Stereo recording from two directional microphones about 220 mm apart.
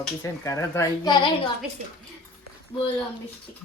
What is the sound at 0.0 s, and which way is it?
Speech, 10° left (ahead or behind).